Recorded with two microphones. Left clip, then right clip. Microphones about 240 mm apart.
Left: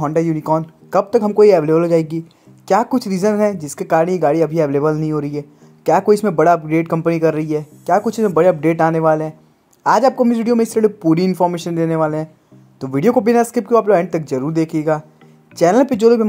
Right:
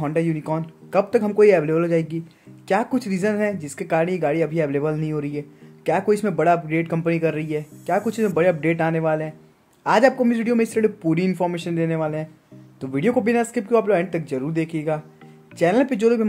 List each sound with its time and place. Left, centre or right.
0.0 s speech: centre